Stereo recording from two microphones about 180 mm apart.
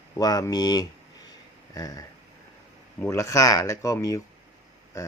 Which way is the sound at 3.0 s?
15° left (ahead or behind).